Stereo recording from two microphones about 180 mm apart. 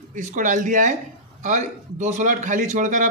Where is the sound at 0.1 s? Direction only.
45° right (ahead or behind).